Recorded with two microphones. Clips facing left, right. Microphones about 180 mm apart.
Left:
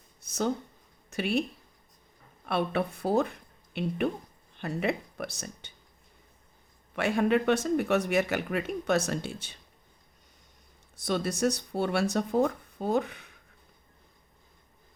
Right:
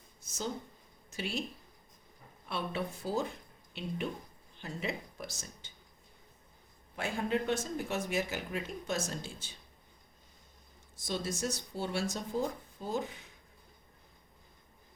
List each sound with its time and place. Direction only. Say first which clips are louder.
0.2 s speech: left 9 dB; 65° left (ahead or behind)
2.5 s speech: left 8 dB; 60° left (ahead or behind)
6.9 s speech: left 8 dB; 70° left (ahead or behind)
10.9 s speech: left 7 dB; 65° left (ahead or behind)